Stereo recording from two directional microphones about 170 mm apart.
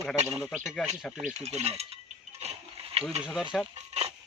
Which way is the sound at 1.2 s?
40° right (ahead or behind).